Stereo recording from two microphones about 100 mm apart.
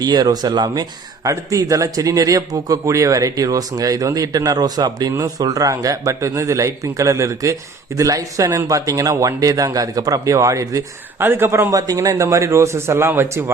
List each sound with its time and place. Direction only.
0.0 s a man's voice: 40° right (ahead or behind)
11.2 s a man's voice: 20° right (ahead or behind)
11.7 s a man's voice: 35° right (ahead or behind)